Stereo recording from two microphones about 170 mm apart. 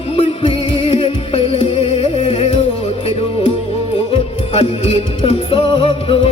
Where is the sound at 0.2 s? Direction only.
35° left (ahead or behind).